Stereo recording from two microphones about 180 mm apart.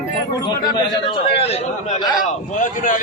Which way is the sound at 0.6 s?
25° left (ahead or behind).